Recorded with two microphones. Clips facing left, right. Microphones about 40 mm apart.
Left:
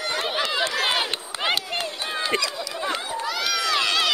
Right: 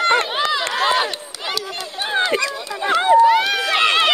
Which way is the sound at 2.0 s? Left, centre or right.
Right.